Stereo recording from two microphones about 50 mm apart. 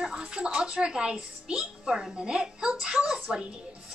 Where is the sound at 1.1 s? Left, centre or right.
Centre.